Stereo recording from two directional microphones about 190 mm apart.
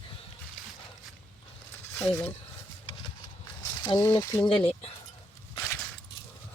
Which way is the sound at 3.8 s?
20° left (ahead or behind).